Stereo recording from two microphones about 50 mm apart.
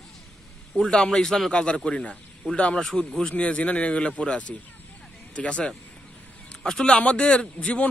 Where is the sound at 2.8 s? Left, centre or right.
Centre.